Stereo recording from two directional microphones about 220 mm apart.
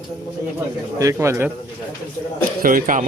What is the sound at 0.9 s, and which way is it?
Speech, 15° right (ahead or behind).